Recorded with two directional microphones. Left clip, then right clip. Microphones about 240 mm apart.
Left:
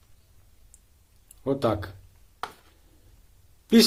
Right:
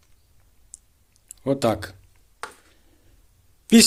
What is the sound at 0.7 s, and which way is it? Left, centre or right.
Clicking, right.